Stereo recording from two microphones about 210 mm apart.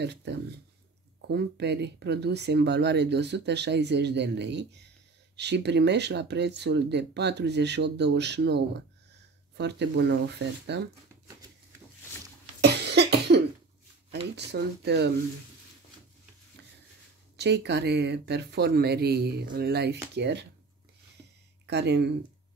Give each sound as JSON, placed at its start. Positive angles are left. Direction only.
{"t": 0.0, "sound": "speech", "side_deg": -55}
{"t": 12.6, "sound": "cough", "side_deg": -50}
{"t": 14.3, "sound": "speech", "side_deg": -55}
{"t": 17.4, "sound": "speech", "side_deg": -55}
{"t": 21.6, "sound": "speech", "side_deg": -55}